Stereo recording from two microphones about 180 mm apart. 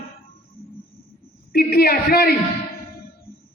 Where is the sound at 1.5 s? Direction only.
60° left (ahead or behind).